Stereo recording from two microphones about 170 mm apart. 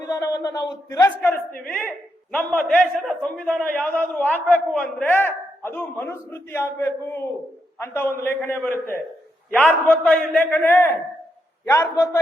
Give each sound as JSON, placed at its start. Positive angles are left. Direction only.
{"t": 0.0, "sound": "a man's voice", "side_deg": 15}
{"t": 10.0, "sound": "a man's voice", "side_deg": 10}